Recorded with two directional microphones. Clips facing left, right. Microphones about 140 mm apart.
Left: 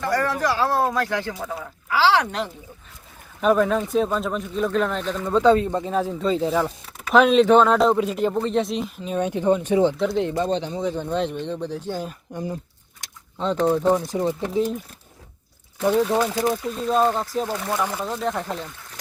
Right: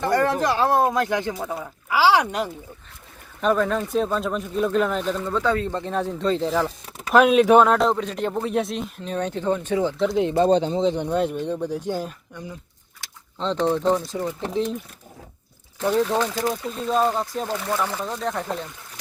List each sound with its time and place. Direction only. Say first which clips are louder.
0.0 s speech: right 2 dB; 25° right (ahead or behind)
3.4 s speech: left 2 dB; 5° left (ahead or behind)
5.2 s speech: left 10 dB; 20° left (ahead or behind)
10.3 s speech: right 5 dB; 30° right (ahead or behind); by 12.0 s 10° right (ahead or behind)
12.3 s speech: left 7 dB; 45° left (ahead or behind)
13.4 s speech: left 2 dB; 10° left (ahead or behind)
14.1 s speech: left 4 dB; 20° left (ahead or behind)
14.5 s speech: even; 5° left (ahead or behind)
15.8 s speech: left 2 dB; 10° left (ahead or behind)
16.7 s speech: even; centre (ahead or behind)